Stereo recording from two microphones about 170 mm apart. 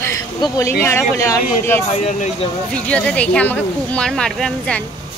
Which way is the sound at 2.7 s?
5° left (ahead or behind).